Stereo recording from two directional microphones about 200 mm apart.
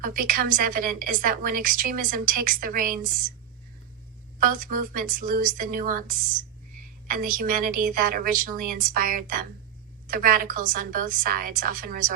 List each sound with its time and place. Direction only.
0.0 s a woman's voice: 45° right (ahead or behind)
4.4 s a woman's voice: 45° right (ahead or behind)